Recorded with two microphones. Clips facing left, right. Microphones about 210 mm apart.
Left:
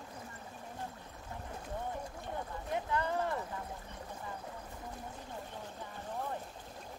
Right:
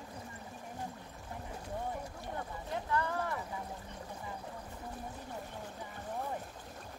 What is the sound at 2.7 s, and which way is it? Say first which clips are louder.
Boat: left 1 dB; 20° left (ahead or behind).